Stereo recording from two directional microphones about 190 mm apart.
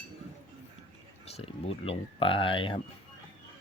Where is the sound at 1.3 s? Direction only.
30° left (ahead or behind).